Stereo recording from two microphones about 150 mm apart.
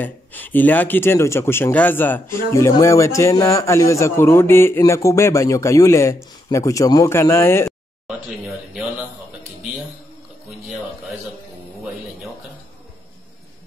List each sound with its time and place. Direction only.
0.0 s speech: 10° left (ahead or behind)
8.1 s speech: centre (ahead or behind)